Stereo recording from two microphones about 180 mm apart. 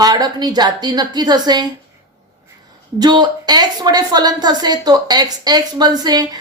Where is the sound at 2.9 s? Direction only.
25° right (ahead or behind).